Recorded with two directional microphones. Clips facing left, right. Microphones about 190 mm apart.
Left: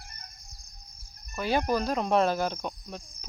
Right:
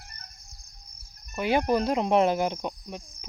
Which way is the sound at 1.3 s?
20° right (ahead or behind).